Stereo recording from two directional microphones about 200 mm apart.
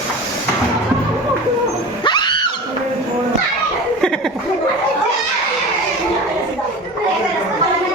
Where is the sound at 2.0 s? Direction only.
20° left (ahead or behind).